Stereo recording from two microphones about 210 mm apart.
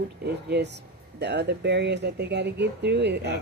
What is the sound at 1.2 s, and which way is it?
Speech, 55° right (ahead or behind).